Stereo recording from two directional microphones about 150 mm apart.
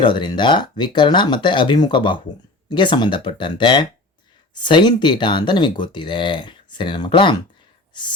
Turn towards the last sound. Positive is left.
turn(degrees=35)  # may be behind; listen again after turning